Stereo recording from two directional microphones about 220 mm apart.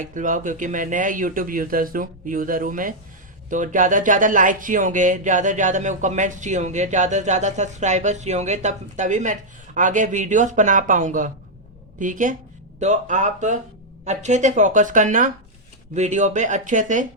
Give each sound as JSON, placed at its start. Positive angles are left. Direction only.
{"t": 0.0, "sound": "speech", "side_deg": -35}